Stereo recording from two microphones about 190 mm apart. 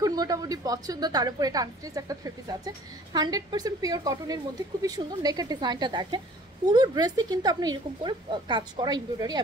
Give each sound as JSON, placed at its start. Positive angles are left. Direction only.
{"t": 0.0, "sound": "a woman's voice", "side_deg": -20}